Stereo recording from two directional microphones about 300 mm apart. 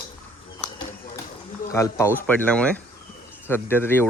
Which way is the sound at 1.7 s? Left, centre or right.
Centre.